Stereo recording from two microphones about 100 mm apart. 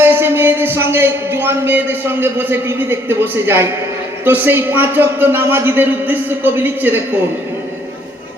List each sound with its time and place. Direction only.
0.0 s a man's voice: 20° right (ahead or behind)